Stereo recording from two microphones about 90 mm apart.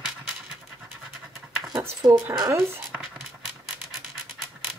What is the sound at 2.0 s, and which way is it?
Speech, 35° right (ahead or behind).